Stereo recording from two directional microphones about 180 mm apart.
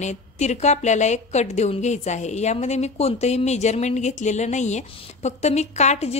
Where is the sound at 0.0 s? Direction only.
40° left (ahead or behind).